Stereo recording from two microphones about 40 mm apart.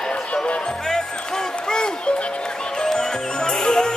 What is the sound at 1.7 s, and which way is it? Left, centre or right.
Music, left.